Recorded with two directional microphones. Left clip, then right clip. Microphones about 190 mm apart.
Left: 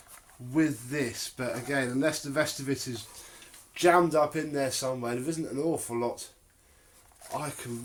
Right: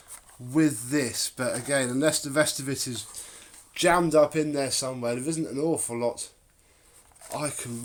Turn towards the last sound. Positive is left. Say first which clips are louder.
# right 4 dB
turn(degrees=-55)  # may be behind; listen again after turning